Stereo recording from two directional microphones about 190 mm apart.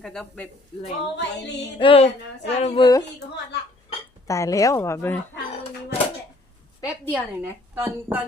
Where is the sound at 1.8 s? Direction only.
30° left (ahead or behind).